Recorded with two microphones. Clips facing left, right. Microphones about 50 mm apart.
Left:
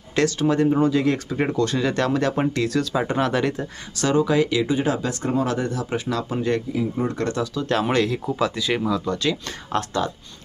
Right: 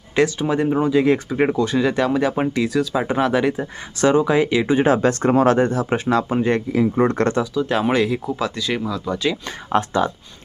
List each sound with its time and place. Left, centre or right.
0.2 s speech: centre
4.0 s speech: right
4.6 s speech: right
6.7 s speech: right
7.5 s speech: centre
9.0 s speech: centre
9.7 s speech: right